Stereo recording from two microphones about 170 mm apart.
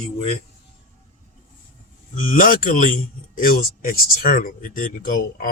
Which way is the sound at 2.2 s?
55° left (ahead or behind).